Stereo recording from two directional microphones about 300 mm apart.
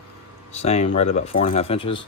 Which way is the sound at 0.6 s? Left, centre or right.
Left.